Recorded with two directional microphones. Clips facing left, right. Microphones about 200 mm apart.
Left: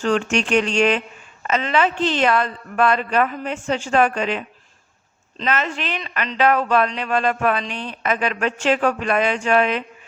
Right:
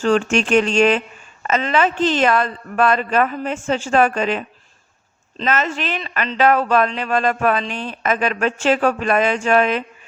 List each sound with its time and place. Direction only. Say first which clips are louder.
0.0 s speech: right 3 dB; 45° right (ahead or behind)